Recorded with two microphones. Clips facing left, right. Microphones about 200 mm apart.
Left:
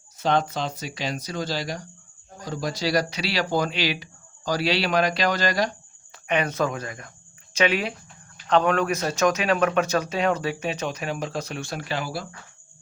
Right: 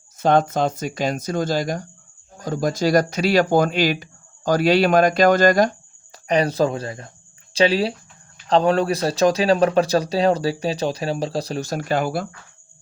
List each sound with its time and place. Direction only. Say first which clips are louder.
0.2 s speech: right 6 dB; 50° right (ahead or behind)